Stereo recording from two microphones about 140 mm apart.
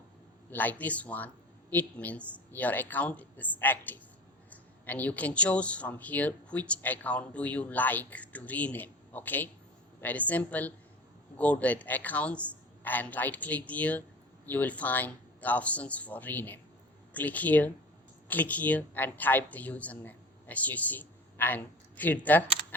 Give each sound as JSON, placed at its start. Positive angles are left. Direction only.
{"t": 0.5, "sound": "speech", "side_deg": 10}